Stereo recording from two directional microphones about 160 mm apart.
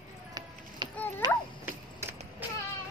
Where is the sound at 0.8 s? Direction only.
30° right (ahead or behind).